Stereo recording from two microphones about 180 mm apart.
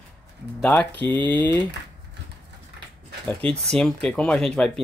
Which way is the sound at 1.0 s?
25° right (ahead or behind).